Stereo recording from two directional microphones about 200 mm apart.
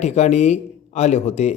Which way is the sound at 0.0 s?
35° left (ahead or behind).